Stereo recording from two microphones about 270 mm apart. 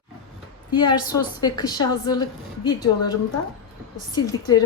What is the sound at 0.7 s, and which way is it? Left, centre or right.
A woman's voice, centre.